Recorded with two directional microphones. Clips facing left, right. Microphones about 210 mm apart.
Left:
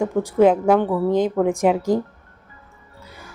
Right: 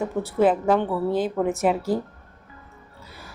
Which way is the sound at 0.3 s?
15° left (ahead or behind).